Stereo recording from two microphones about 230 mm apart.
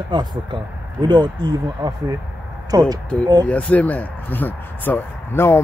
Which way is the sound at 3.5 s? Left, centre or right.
Centre.